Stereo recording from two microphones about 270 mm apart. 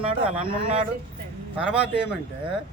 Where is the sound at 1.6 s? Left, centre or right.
Centre.